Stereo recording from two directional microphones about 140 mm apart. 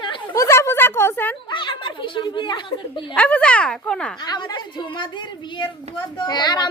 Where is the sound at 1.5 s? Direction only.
35° left (ahead or behind).